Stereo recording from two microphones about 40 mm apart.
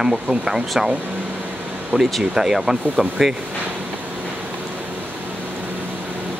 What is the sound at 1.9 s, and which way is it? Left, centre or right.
Speech, right.